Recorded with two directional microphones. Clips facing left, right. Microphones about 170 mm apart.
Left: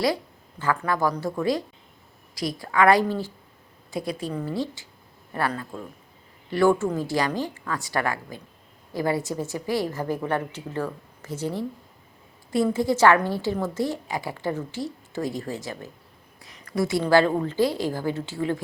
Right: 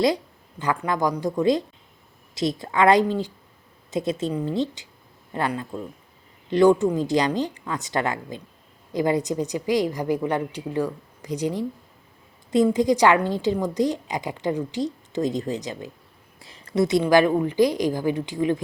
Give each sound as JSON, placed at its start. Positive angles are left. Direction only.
{"t": 0.6, "sound": "a woman's voice", "side_deg": -20}